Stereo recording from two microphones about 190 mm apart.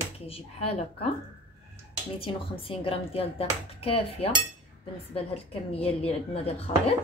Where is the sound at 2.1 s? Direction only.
30° left (ahead or behind).